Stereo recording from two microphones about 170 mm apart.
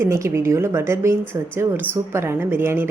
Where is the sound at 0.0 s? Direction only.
15° right (ahead or behind).